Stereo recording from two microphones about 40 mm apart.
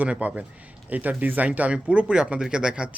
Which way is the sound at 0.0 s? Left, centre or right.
Right.